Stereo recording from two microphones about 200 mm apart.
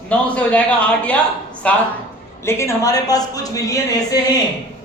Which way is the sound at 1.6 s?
5° left (ahead or behind).